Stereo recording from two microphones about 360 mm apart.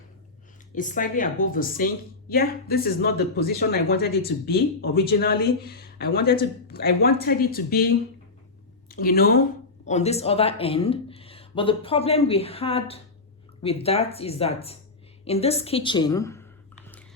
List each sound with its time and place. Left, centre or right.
0.7 s speech: left